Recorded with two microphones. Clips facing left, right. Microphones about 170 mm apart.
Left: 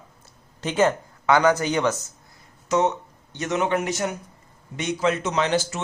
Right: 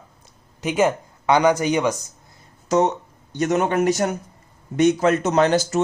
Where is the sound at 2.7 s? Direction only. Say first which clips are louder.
Right 3 dB; 40° right (ahead or behind).